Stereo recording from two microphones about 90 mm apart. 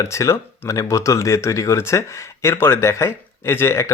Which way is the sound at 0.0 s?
35° left (ahead or behind).